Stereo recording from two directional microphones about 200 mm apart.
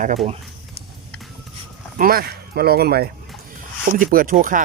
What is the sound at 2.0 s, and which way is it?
Speech, 45° right (ahead or behind).